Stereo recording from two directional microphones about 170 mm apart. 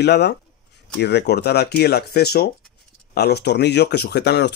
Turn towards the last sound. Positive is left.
turn(degrees=75)  # may be behind; listen again after turning